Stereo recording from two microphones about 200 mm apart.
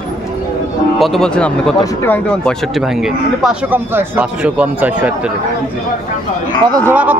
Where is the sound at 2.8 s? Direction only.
Centre (ahead or behind).